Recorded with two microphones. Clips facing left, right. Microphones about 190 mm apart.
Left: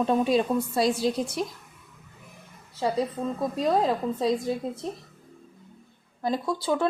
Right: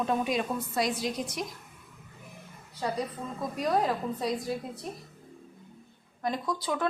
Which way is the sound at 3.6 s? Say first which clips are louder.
Left 3 dB; 25° left (ahead or behind).